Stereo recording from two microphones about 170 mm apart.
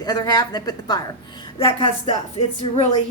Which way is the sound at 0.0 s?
25° left (ahead or behind).